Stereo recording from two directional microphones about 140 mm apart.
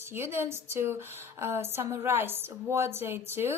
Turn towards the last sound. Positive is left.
turn(degrees=-15)  # may be behind; listen again after turning